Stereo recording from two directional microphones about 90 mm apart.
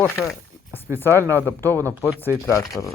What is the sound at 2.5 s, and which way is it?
Speech, 35° left (ahead or behind).